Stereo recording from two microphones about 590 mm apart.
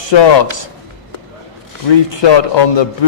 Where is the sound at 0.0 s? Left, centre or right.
Left.